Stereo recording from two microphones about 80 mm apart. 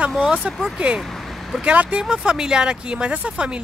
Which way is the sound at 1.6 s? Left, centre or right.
Centre.